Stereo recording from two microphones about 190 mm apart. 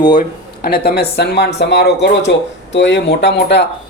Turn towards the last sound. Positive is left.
turn(degrees=65)  # may be behind; listen again after turning